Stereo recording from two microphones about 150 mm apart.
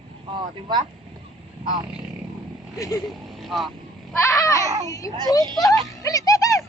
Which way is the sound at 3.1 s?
Centre (ahead or behind).